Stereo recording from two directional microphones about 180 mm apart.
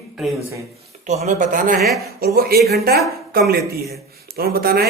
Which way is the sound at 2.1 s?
60° right (ahead or behind).